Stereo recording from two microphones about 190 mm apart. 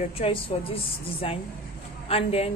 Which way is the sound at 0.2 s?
30° left (ahead or behind).